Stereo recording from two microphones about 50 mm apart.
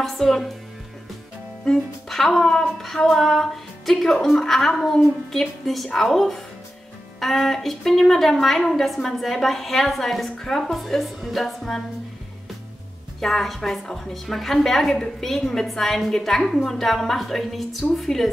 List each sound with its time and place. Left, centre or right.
0.0 s a woman's voice: centre
2.0 s a woman's voice: centre
13.2 s a woman's voice: centre